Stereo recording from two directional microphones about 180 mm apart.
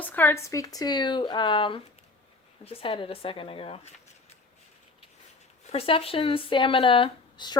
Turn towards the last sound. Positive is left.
turn(degrees=25)  # may be behind; listen again after turning